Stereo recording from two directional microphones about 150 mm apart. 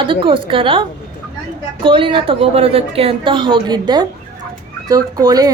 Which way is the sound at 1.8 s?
35° right (ahead or behind).